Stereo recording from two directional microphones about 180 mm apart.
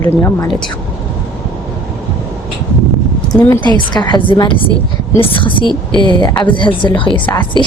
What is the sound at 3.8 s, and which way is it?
A woman's voice, 25° left (ahead or behind).